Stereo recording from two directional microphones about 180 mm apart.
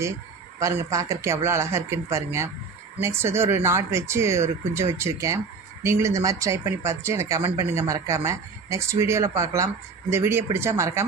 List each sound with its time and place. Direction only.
0.6 s speech: 15° right (ahead or behind)